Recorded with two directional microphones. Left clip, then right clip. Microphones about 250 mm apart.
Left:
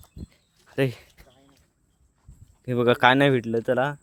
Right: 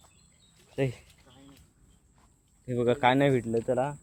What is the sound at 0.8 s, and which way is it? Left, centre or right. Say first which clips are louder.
Speech: left 6 dB; left.